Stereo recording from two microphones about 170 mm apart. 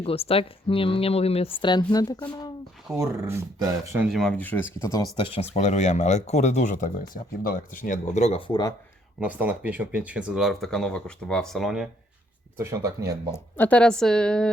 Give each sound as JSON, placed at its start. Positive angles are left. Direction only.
{"t": 0.0, "sound": "speech", "side_deg": 35}
{"t": 3.0, "sound": "speech", "side_deg": -15}
{"t": 4.2, "sound": "speech", "side_deg": 10}
{"t": 5.1, "sound": "speech", "side_deg": 30}
{"t": 9.2, "sound": "speech", "side_deg": -10}
{"t": 12.5, "sound": "speech", "side_deg": -20}
{"t": 13.3, "sound": "speech", "side_deg": 10}